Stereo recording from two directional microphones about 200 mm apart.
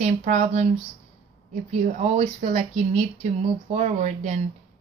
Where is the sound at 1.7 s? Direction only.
35° right (ahead or behind).